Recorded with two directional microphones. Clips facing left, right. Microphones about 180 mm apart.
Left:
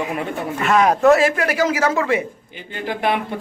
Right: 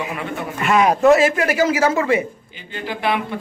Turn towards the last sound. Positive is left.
turn(degrees=45)  # may be behind; listen again after turning